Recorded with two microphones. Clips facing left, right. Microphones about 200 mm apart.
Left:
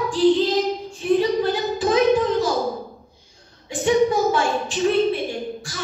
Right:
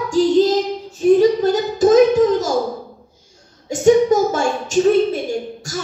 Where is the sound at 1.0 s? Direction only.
40° right (ahead or behind).